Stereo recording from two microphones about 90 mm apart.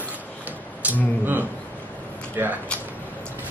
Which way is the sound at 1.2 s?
20° right (ahead or behind).